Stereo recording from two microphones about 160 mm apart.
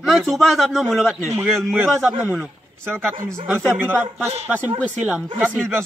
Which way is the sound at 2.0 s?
10° right (ahead or behind).